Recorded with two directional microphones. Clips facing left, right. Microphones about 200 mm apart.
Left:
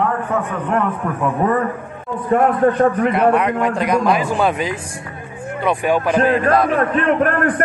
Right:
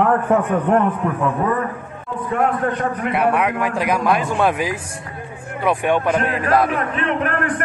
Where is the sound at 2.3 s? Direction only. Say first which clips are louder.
Left 6 dB; 40° left (ahead or behind).